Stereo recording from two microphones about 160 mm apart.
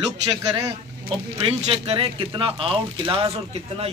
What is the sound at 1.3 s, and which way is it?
Speech, 35° right (ahead or behind).